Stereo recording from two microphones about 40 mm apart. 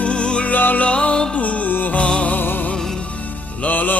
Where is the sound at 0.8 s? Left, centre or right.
Left.